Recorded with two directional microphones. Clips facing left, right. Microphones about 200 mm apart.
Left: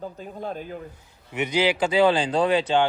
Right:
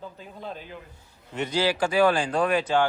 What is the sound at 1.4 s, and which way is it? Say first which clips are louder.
Speech: left 2 dB; 20° left (ahead or behind).